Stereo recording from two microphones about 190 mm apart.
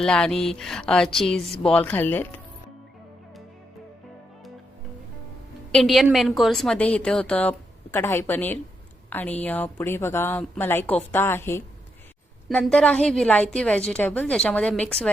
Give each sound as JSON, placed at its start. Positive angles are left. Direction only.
{"t": 0.0, "sound": "a woman's voice", "side_deg": 5}
{"t": 5.7, "sound": "a woman's voice", "side_deg": 0}